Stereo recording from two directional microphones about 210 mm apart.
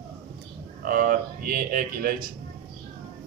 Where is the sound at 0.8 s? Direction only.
40° right (ahead or behind).